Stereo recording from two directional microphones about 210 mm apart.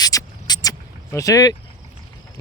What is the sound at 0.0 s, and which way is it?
Vehicle, 15° left (ahead or behind).